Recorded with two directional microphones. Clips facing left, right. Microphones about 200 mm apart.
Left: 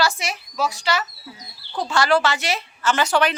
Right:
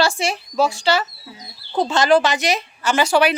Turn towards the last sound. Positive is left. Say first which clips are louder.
# right 3 dB
turn(degrees=-10)  # may be behind; listen again after turning